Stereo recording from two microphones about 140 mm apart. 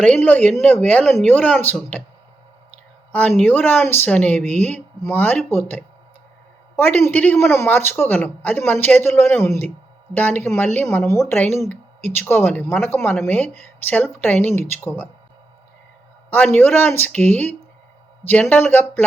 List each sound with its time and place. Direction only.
0.0 s speech: 10° left (ahead or behind)
3.1 s speech: 10° left (ahead or behind)
4.4 s speech: 55° right (ahead or behind)
4.7 s speech: 15° left (ahead or behind)
16.6 s speech: 15° left (ahead or behind)